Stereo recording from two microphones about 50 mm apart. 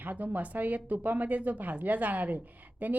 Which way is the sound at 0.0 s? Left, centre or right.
Right.